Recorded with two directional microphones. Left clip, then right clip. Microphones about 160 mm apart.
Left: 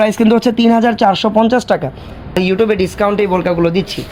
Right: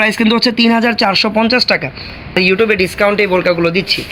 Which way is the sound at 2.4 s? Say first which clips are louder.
Right 2 dB; 50° left (ahead or behind).